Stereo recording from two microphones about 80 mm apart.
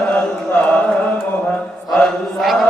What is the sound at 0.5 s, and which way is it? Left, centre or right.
Music, left.